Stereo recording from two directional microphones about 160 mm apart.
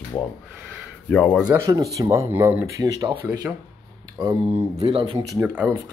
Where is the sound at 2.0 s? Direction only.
20° right (ahead or behind).